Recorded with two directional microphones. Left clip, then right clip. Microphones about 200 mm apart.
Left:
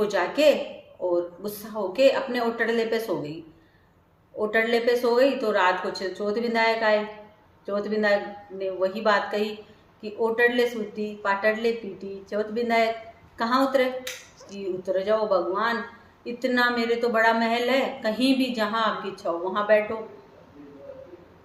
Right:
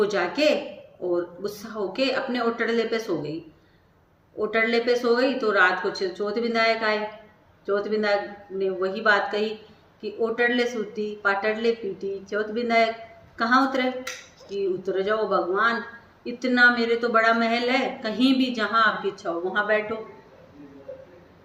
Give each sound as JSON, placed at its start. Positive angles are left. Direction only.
{"t": 0.0, "sound": "a woman's voice", "side_deg": 15}
{"t": 4.4, "sound": "a woman's voice", "side_deg": 15}